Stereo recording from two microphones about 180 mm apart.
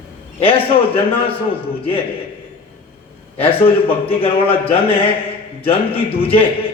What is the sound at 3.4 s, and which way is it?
A man's voice, 30° left (ahead or behind).